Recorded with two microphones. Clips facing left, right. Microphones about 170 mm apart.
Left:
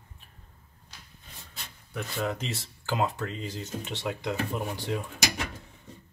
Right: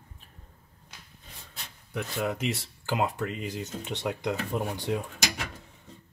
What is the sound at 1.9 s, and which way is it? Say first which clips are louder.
Speech: right 1 dB; 10° right (ahead or behind).